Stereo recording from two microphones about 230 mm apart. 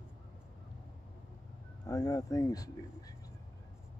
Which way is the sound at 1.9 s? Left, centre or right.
Centre.